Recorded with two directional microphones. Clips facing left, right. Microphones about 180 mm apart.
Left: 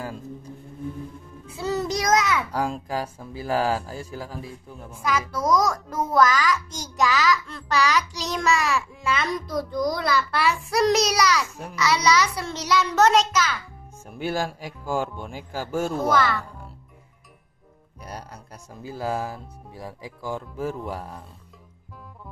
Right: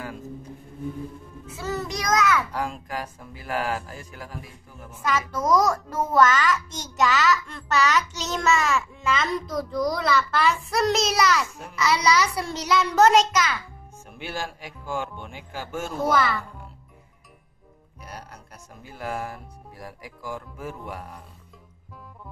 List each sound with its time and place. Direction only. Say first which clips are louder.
2.0 s a sound: right 1 dB; 20° left (ahead or behind)
2.5 s speech: left 4 dB; 35° left (ahead or behind)
5.3 s a child's voice: right 1 dB; 5° right (ahead or behind)
14.1 s speech: left 6 dB; 40° left (ahead or behind)
16.1 s a child's voice: even; centre (ahead or behind)
18.9 s speech: left 3 dB; 30° left (ahead or behind)